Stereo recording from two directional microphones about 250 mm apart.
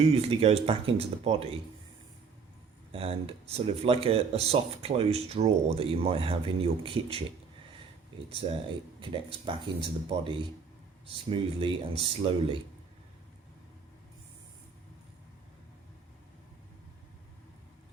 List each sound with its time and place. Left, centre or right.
0.0 s speech: right
2.9 s speech: right
8.4 s speech: right
10.1 s speech: right